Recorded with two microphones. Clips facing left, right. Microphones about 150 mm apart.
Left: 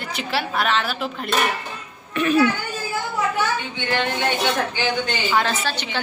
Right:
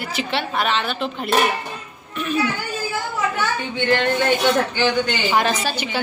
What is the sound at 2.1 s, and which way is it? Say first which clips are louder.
Speech: left 5 dB; 70° left (ahead or behind).